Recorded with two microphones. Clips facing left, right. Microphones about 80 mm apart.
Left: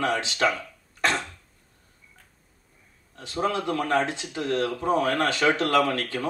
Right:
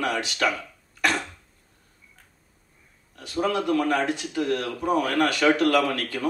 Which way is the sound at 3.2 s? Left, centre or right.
Left.